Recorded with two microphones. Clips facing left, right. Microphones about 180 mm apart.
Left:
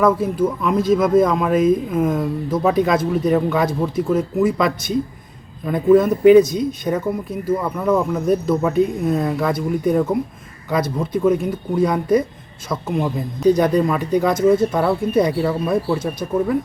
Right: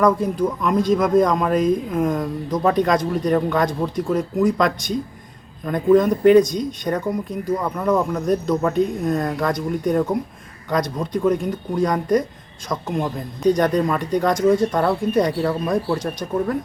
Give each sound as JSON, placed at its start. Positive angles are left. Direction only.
{"t": 0.0, "sound": "speech", "side_deg": 5}